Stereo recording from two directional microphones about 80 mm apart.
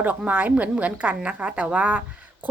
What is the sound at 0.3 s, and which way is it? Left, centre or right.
Speech, right.